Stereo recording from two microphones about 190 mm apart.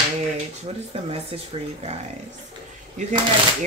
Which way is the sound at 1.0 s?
30° right (ahead or behind).